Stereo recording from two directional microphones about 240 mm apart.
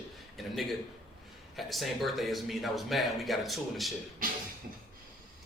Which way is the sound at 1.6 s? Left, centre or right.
Centre.